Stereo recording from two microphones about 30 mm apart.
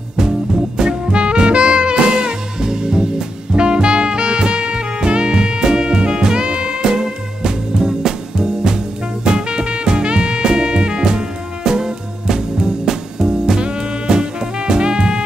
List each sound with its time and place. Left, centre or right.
0.7 s music: right